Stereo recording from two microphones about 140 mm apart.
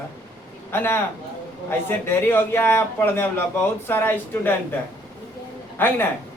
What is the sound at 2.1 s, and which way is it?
A man's voice, 15° left (ahead or behind).